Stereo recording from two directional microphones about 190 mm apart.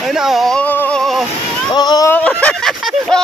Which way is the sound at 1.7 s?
20° left (ahead or behind).